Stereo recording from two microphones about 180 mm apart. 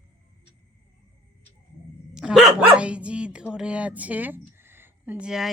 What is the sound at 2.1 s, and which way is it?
Dog, 5° right (ahead or behind).